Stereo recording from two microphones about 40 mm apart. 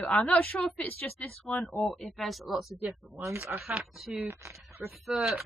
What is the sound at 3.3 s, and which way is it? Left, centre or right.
Speech, right.